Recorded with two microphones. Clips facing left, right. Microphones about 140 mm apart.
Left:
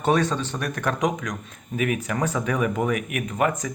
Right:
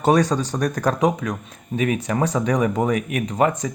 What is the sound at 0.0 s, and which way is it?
Speech, 40° right (ahead or behind).